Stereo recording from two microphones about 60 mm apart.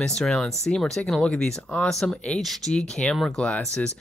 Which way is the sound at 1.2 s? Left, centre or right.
Centre.